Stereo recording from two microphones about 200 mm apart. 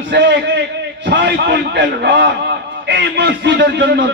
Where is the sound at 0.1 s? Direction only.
60° right (ahead or behind).